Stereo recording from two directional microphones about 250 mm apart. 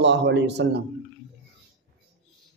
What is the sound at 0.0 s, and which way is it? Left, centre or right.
Speech, right.